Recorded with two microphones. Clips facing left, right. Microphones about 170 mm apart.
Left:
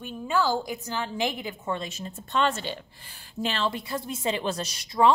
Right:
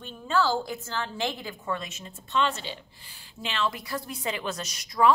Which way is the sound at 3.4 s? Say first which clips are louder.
Left 2 dB; 35° left (ahead or behind).